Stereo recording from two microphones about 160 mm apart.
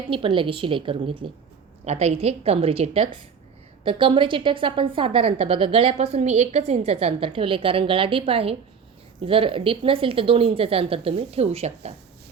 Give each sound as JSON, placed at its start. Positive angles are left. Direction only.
{"t": 0.1, "sound": "a woman's voice", "side_deg": -35}